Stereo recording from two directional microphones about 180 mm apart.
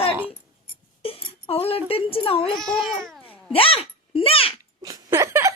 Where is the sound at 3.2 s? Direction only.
30° left (ahead or behind).